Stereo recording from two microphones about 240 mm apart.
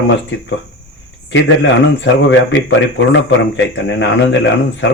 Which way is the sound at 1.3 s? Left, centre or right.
Left.